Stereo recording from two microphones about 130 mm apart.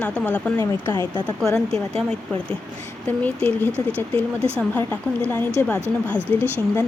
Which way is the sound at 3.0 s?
10° left (ahead or behind).